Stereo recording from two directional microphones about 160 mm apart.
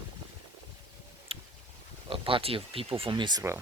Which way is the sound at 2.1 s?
35° right (ahead or behind).